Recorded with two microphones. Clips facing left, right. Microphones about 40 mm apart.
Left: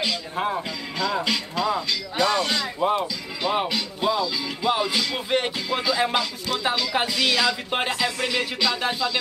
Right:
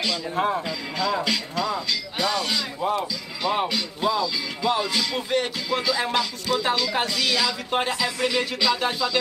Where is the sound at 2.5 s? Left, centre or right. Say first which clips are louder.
Left 2 dB; left.